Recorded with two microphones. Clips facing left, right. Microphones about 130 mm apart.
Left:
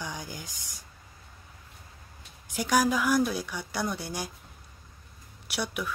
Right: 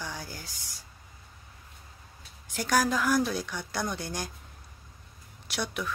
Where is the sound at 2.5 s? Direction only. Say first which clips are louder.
Left 1 dB; 10° left (ahead or behind).